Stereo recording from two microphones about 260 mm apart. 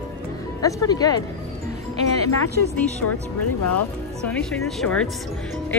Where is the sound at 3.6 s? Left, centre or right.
Left.